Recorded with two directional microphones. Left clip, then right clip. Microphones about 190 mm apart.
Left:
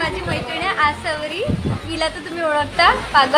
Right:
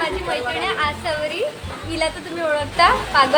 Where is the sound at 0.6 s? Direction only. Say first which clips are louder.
Left 3 dB; 15° left (ahead or behind).